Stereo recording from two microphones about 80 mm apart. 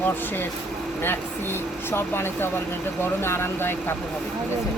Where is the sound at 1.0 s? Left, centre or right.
Left.